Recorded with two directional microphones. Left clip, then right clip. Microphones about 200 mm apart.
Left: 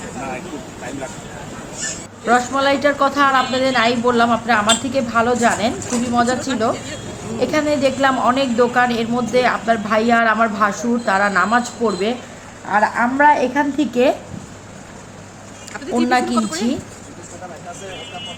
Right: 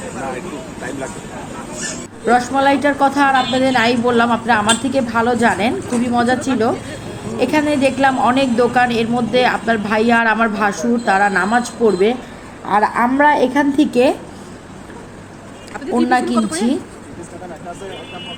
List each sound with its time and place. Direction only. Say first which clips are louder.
2.2 s a woman's voice: right 2 dB; 15° right (ahead or behind)
16.0 s a woman's voice: right 1 dB; 10° right (ahead or behind)
16.3 s a woman's voice: right 2 dB; 10° left (ahead or behind)